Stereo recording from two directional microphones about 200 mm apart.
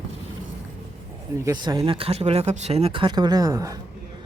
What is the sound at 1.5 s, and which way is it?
Speech, 15° right (ahead or behind).